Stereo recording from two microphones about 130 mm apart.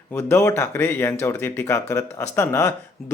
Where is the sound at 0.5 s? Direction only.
15° left (ahead or behind).